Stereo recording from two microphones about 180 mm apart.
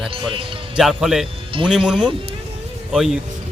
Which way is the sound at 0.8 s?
Centre (ahead or behind).